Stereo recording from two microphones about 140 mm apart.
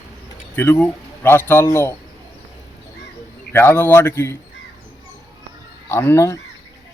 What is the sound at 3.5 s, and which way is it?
Speech, 15° left (ahead or behind).